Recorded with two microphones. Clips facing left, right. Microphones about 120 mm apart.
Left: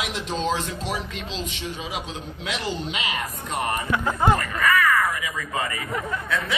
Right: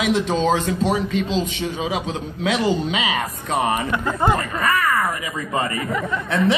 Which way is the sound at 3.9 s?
5° left (ahead or behind).